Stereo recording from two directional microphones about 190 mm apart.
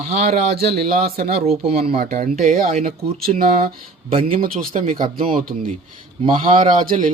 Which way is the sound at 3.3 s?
35° right (ahead or behind).